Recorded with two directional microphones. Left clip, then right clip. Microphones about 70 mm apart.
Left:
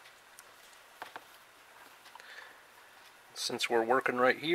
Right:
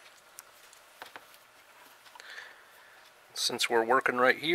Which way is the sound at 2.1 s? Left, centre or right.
Right.